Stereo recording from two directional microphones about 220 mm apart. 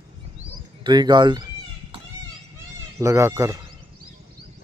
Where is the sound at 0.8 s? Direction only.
20° right (ahead or behind).